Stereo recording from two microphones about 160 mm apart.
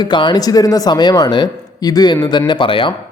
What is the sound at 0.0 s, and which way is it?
A man's voice, 30° left (ahead or behind).